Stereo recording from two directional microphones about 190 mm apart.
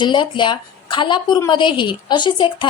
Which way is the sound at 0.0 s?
25° left (ahead or behind).